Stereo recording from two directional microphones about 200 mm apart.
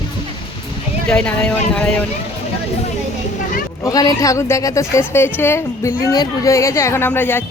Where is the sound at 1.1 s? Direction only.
5° left (ahead or behind).